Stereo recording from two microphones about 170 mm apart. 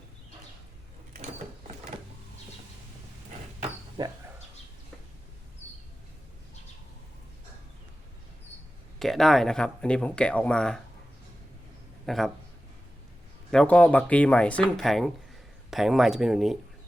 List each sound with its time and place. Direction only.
4.0 s a sound: 25° right (ahead or behind)
9.0 s speech: centre (ahead or behind)
12.0 s speech: centre (ahead or behind)
13.5 s speech: 5° left (ahead or behind)